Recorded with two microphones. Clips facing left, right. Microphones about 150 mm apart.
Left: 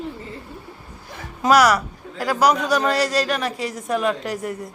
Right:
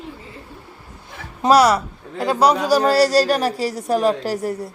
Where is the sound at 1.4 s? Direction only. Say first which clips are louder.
Right 2 dB; 30° right (ahead or behind).